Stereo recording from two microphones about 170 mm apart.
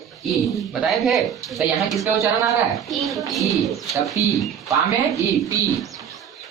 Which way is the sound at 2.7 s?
Centre (ahead or behind).